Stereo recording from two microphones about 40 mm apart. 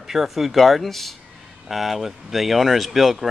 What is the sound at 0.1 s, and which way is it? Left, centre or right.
Speech, centre.